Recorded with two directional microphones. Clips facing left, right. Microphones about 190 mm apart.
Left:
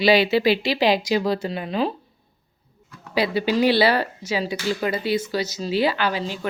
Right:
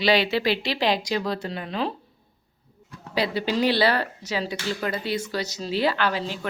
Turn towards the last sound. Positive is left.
turn(degrees=5)  # may be behind; listen again after turning